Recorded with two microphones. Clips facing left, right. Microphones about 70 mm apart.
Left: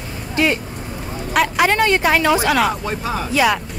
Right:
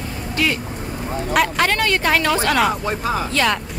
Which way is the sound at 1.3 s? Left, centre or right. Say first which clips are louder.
Left 2 dB; centre.